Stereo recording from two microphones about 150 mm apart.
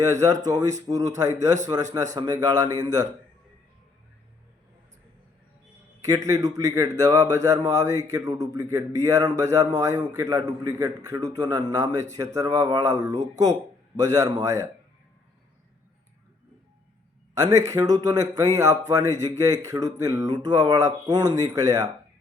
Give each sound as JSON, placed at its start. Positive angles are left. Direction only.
{"t": 0.0, "sound": "a man's voice", "side_deg": -20}
{"t": 6.0, "sound": "a man's voice", "side_deg": -20}
{"t": 17.3, "sound": "a man's voice", "side_deg": -25}